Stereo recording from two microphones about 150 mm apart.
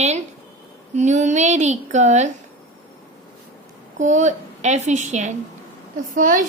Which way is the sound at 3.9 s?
55° right (ahead or behind).